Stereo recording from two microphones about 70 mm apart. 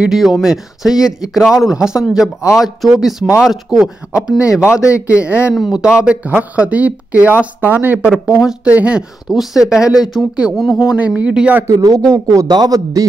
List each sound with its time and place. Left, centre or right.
0.1 s a man's voice: centre
9.3 s speech: centre
10.9 s a man's voice: centre
11.6 s a man's voice: right